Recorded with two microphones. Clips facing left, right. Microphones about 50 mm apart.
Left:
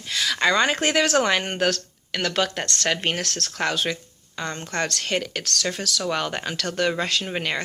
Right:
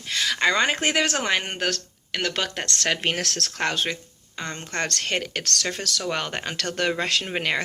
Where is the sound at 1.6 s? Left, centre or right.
Centre.